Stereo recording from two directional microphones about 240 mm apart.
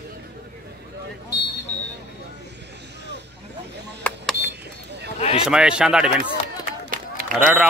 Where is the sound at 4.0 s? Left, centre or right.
Centre.